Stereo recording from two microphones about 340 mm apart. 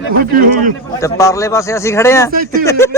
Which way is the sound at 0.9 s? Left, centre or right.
Centre.